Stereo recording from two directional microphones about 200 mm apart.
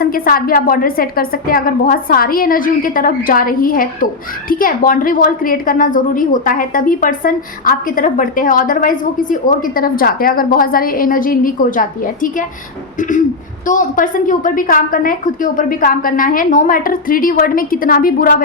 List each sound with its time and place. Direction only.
0.0 s a woman's voice: 45° left (ahead or behind)
13.0 s a sound: 40° left (ahead or behind)
13.7 s a woman's voice: 40° left (ahead or behind)